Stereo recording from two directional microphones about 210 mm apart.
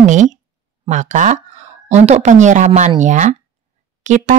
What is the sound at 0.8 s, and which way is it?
Speech, 35° right (ahead or behind).